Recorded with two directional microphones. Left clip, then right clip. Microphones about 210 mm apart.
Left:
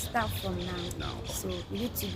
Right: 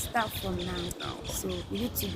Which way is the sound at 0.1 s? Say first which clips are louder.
Right 1 dB; 5° left (ahead or behind).